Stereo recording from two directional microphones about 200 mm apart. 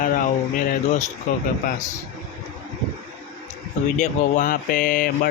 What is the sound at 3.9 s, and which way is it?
Speech, 40° left (ahead or behind).